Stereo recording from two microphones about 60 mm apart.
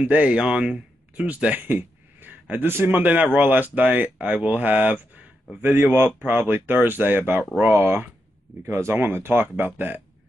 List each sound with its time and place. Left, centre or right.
0.0 s speech: right
1.7 s a sound: right
2.6 s speech: right
8.9 s speech: right